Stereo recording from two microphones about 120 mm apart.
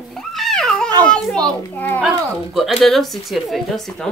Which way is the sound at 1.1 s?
5° left (ahead or behind).